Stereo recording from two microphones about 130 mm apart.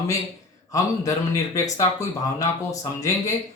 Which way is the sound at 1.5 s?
25° left (ahead or behind).